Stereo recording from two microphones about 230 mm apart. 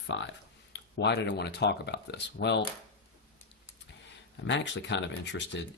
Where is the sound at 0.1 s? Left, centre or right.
Left.